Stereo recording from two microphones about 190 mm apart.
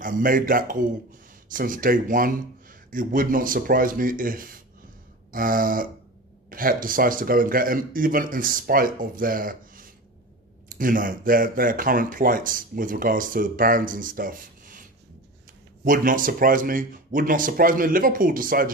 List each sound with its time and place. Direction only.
0.0 s speech: 45° right (ahead or behind)